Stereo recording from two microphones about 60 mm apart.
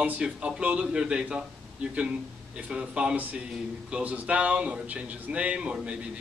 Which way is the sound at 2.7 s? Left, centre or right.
Centre.